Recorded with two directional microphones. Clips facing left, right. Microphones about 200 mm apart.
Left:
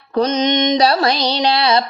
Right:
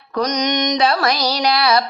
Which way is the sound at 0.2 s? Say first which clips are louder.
Left 4 dB; 25° left (ahead or behind).